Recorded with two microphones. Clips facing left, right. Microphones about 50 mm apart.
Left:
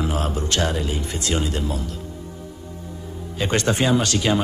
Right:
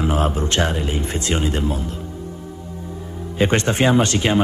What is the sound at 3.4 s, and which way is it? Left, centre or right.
Speech, right.